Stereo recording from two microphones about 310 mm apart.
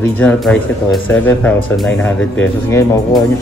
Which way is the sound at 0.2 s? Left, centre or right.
Centre.